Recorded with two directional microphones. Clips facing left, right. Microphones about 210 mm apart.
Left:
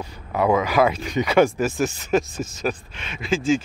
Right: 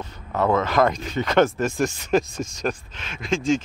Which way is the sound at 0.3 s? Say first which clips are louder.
Left 1 dB; 10° left (ahead or behind).